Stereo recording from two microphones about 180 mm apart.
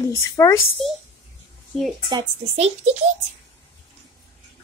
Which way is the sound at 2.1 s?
30° right (ahead or behind).